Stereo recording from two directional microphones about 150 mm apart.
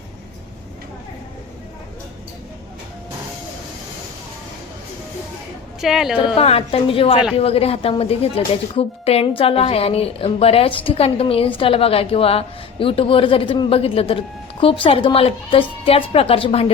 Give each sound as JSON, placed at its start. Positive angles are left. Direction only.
{"t": 5.8, "sound": "speech", "side_deg": 0}
{"t": 6.1, "sound": "speech", "side_deg": 40}